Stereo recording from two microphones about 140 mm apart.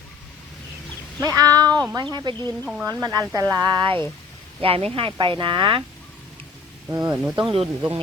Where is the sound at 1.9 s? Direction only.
30° right (ahead or behind).